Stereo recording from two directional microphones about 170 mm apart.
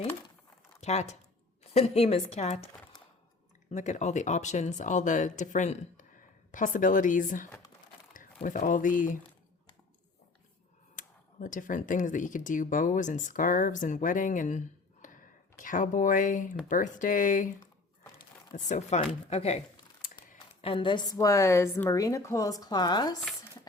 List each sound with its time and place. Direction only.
0.8 s a woman's voice: 40° left (ahead or behind)
3.7 s speech: 40° left (ahead or behind)
10.9 s speech: 50° left (ahead or behind)
18.2 s crumpling: 45° left (ahead or behind)
19.3 s a woman's voice: 40° left (ahead or behind)